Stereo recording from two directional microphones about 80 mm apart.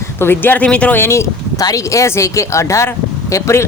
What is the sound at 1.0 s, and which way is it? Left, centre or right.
Speech, left.